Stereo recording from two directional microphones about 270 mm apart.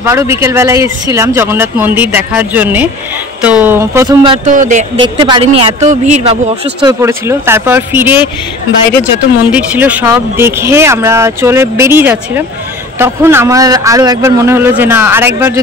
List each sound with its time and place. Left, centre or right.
0.0 s speech: centre; by 6.3 s right
6.8 s speech: centre
9.5 s speech: centre